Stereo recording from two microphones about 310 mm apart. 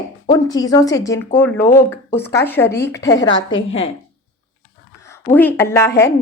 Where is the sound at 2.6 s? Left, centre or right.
Left.